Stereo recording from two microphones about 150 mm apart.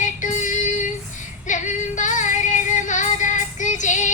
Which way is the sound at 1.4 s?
55° left (ahead or behind).